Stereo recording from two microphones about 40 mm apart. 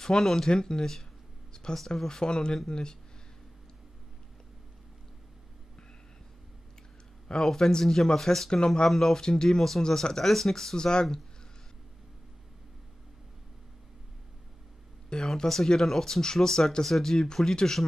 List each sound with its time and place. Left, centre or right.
0.0 s speech: centre
1.5 s a sound: centre
2.0 s speech: centre
7.4 s speech: centre
8.5 s speech: centre
15.0 s speech: centre